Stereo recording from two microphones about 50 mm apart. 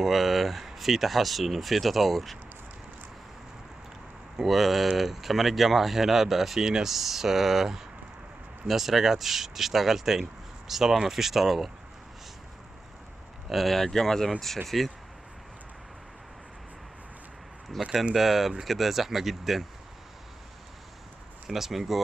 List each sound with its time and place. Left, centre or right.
0.0 s speech: centre
4.4 s speech: centre
13.5 s speech: centre
17.8 s speech: centre
21.5 s speech: centre